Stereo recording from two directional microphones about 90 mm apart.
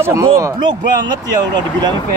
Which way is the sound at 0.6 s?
60° right (ahead or behind).